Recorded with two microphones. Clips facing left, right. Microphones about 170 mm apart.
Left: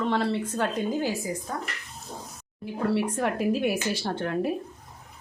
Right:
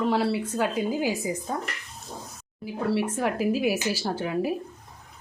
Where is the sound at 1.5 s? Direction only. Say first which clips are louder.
Right 4 dB; 20° right (ahead or behind).